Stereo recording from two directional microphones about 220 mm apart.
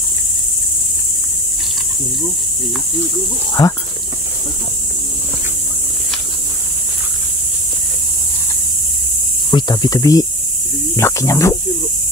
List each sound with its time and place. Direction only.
3.6 s speech: 15° left (ahead or behind)
9.5 s speech: 20° left (ahead or behind)